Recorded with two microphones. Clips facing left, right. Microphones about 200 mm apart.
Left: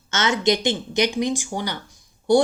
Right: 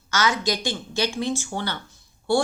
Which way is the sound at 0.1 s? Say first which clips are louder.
Left 3 dB; 25° left (ahead or behind).